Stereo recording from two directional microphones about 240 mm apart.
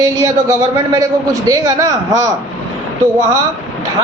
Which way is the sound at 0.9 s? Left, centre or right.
Centre.